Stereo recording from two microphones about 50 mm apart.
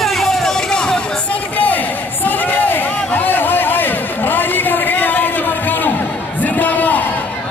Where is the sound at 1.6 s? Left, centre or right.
Left.